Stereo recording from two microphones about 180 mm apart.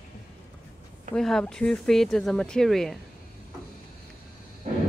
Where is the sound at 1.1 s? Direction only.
5° left (ahead or behind).